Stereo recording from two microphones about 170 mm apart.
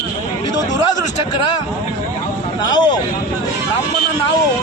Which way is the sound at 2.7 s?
25° left (ahead or behind).